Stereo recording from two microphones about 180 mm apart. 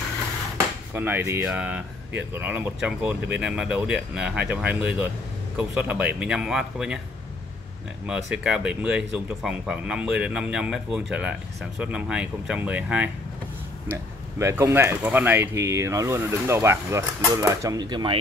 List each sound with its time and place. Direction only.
0.9 s speech: 10° right (ahead or behind)
8.1 s speech: 5° right (ahead or behind)
14.4 s speech: 15° right (ahead or behind)